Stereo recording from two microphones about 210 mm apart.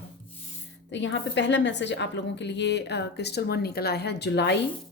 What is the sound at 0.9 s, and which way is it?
A woman's voice, 60° left (ahead or behind).